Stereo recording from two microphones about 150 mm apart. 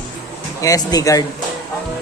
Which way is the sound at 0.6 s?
25° left (ahead or behind).